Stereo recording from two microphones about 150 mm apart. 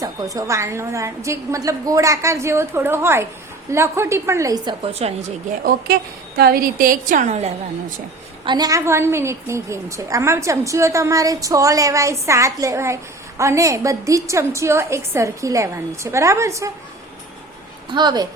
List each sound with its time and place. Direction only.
0.0 s a woman's voice: 20° right (ahead or behind)
4.9 s a woman's voice: 45° right (ahead or behind)
5.6 s a woman's voice: 90° right; by 7.5 s 45° right (ahead or behind)
8.4 s a woman's voice: 25° right (ahead or behind)
17.9 s a woman's voice: 30° right (ahead or behind)